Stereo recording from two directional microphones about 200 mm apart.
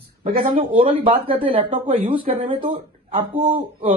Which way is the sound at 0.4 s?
30° right (ahead or behind).